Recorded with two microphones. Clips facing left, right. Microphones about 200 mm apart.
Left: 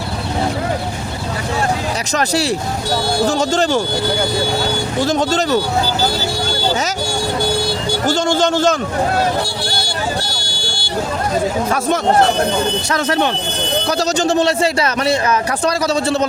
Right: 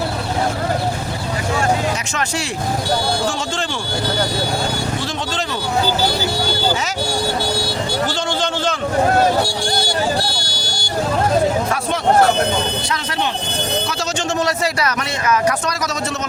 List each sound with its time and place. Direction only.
2.1 s a man's voice: 35° left (ahead or behind)
5.0 s a man's voice: 45° left (ahead or behind)
8.0 s a man's voice: 45° left (ahead or behind)
10.2 s vehicle: 40° right (ahead or behind)
12.9 s a man's voice: 50° left (ahead or behind)
13.8 s a man's voice: 40° left (ahead or behind)